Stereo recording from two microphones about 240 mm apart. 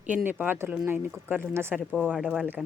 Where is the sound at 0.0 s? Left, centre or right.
Centre.